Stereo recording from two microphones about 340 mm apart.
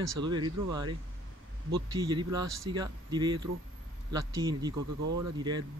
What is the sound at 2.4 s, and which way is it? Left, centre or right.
Speech, right.